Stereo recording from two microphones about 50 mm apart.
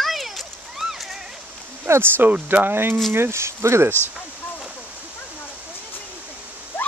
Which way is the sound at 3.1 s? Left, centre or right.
Right.